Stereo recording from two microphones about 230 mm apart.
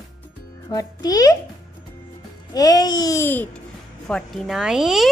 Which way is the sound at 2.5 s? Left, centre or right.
Centre.